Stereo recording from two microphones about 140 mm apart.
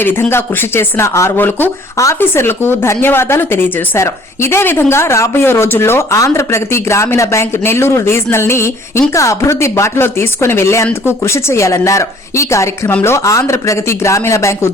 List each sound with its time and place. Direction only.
0.0 s speech: 15° left (ahead or behind)